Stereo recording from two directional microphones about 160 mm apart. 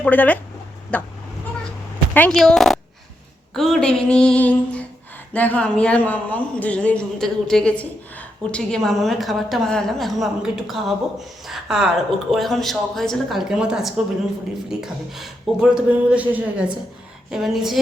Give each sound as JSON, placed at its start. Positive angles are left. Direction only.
{"t": 0.0, "sound": "speech", "side_deg": 10}
{"t": 2.1, "sound": "a woman's voice", "side_deg": 5}